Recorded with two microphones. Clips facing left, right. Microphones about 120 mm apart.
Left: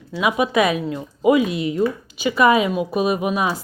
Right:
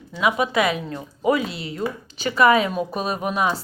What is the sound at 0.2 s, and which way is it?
A woman's voice, 20° left (ahead or behind).